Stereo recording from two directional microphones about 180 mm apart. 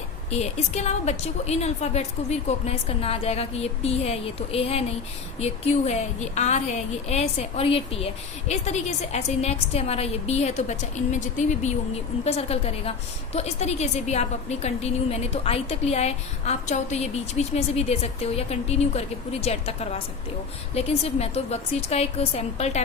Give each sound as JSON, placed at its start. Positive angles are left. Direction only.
{"t": 0.3, "sound": "a woman's voice", "side_deg": 40}